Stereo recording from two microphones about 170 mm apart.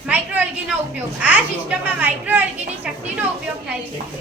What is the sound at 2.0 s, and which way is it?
Speech, 10° right (ahead or behind).